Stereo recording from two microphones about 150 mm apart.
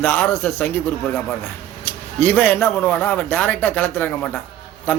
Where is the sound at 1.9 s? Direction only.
10° left (ahead or behind).